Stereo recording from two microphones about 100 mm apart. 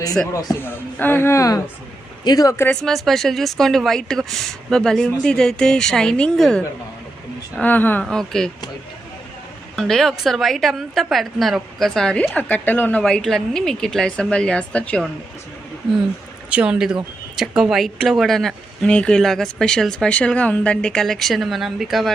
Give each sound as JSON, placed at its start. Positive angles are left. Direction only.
{"t": 0.6, "sound": "speech", "side_deg": 20}
{"t": 2.6, "sound": "speech", "side_deg": 5}
{"t": 7.6, "sound": "speech", "side_deg": 20}
{"t": 8.0, "sound": "speech", "side_deg": 5}
{"t": 9.7, "sound": "speech", "side_deg": 5}
{"t": 12.2, "sound": "speech", "side_deg": 15}
{"t": 13.0, "sound": "speech", "side_deg": 5}
{"t": 16.5, "sound": "speech", "side_deg": -10}